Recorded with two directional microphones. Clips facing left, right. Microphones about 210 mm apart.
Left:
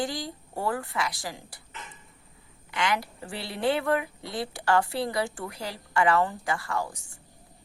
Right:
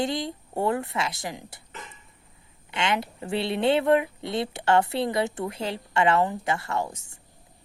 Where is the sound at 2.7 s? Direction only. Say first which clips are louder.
Right 2 dB; 25° right (ahead or behind).